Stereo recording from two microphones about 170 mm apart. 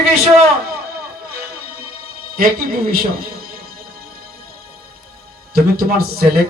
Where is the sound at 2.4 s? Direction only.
60° right (ahead or behind).